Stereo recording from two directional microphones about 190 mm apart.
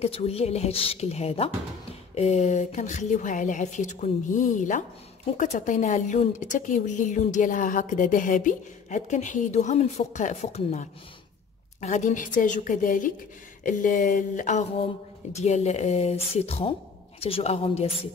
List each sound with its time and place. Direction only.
0.0 s a woman's voice: 30° left (ahead or behind)